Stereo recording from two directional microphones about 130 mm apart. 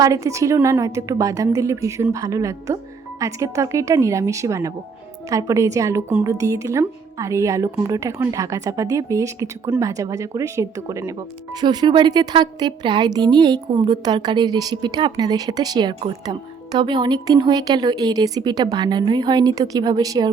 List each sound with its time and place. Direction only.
0.0 s a woman's voice: 25° right (ahead or behind)